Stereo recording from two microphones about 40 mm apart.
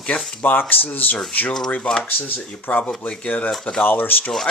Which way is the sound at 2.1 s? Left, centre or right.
Left.